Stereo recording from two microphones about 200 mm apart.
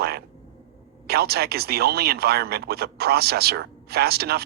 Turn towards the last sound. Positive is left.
turn(degrees=-50)  # may be behind; listen again after turning